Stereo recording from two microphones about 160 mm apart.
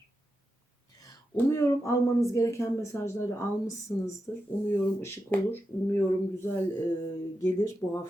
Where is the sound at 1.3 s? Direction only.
15° left (ahead or behind).